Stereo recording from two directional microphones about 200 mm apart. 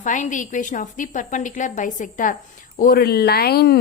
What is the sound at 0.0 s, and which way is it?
A woman's voice, 40° left (ahead or behind).